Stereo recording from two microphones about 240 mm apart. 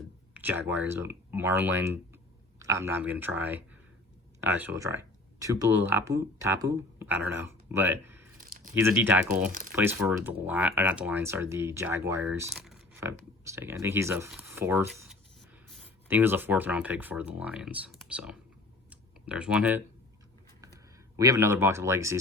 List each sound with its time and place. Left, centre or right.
0.3 s speech: centre
8.4 s squish: right
8.7 s speech: centre
9.5 s speech: right
9.7 s speech: centre
18.9 s typing: centre
21.2 s speech: centre